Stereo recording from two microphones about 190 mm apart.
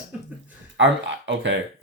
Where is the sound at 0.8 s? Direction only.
70° right (ahead or behind).